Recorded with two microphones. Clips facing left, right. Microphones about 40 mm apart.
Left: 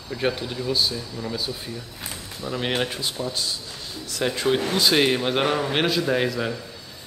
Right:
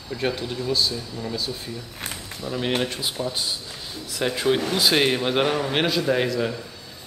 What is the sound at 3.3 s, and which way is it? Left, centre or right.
Speech, centre.